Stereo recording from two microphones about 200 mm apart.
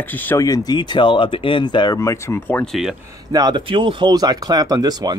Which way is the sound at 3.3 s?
20° right (ahead or behind).